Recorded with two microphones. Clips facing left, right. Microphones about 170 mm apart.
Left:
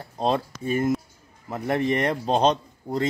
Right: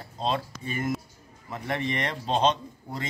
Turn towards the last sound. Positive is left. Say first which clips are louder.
# left 9 dB
turn(degrees=45)  # may be behind; listen again after turning